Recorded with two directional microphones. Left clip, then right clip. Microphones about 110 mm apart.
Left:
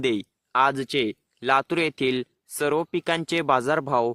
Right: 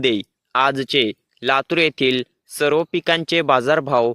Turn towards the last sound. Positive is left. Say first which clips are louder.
# right 6 dB
turn(degrees=-25)  # may be behind; listen again after turning